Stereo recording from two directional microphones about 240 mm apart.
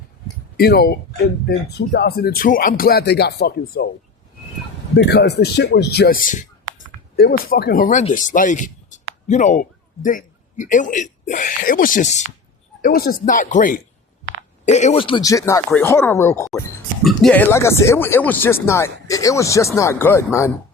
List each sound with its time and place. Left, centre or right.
0.5 s speech: left
4.9 s speech: left; by 16.5 s centre
17.0 s speech: centre